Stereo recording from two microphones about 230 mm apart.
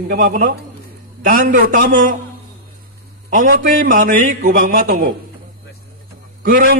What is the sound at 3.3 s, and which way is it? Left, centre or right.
A man's voice, right.